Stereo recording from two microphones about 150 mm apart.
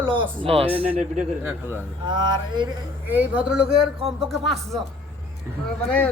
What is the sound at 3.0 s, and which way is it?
Speech, 10° right (ahead or behind).